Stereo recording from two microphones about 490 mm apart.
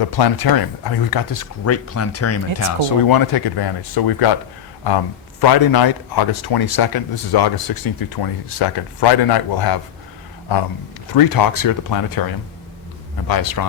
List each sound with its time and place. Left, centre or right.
0.0 s speech: left
3.1 s speech: left
11.1 s speech: left
13.2 s speech: left